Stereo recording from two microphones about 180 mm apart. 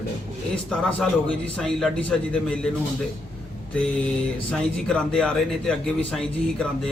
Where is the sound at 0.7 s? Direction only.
5° left (ahead or behind).